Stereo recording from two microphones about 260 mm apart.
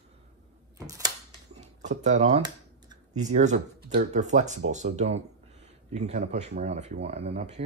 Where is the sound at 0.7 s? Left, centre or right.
Centre.